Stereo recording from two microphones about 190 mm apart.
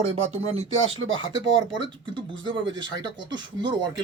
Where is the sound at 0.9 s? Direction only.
90° right.